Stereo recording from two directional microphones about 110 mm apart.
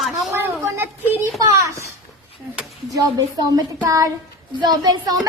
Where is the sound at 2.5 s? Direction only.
10° right (ahead or behind).